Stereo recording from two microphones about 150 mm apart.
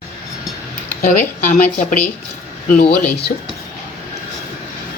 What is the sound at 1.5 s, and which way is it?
Speech, 55° left (ahead or behind).